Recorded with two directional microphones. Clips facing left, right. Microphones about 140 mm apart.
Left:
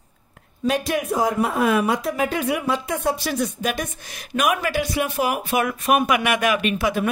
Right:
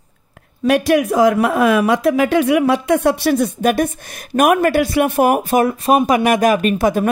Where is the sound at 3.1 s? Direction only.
65° right (ahead or behind).